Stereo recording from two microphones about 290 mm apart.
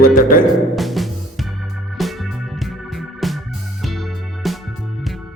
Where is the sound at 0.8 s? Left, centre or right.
Centre.